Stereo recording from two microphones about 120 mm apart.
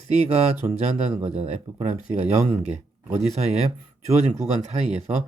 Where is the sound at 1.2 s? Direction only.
65° right (ahead or behind).